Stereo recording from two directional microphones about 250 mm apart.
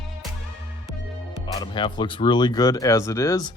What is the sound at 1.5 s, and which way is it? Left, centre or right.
A woman's voice, centre.